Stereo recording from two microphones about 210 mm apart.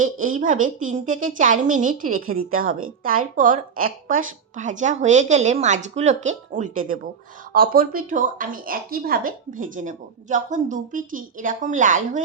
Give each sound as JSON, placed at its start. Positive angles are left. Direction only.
{"t": 0.0, "sound": "a woman's voice", "side_deg": -40}